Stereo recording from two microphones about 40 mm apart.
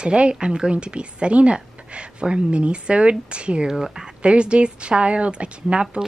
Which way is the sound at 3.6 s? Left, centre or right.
Centre.